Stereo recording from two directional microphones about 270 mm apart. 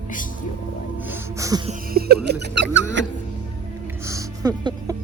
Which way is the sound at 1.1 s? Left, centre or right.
Centre.